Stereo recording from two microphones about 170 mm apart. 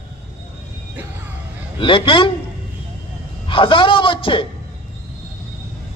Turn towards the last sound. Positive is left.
turn(degrees=30)  # may be behind; listen again after turning